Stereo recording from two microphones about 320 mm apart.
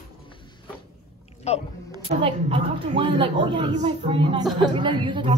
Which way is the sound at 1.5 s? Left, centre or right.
Centre.